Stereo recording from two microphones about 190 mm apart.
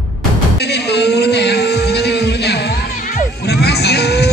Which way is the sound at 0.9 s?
60° left (ahead or behind).